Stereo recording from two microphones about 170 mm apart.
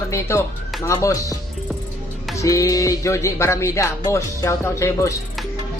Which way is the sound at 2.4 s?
20° left (ahead or behind).